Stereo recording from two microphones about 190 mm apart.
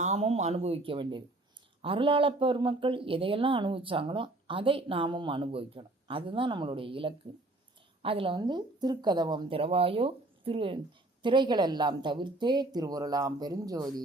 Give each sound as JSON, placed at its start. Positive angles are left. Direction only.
{"t": 0.0, "sound": "speech", "side_deg": -35}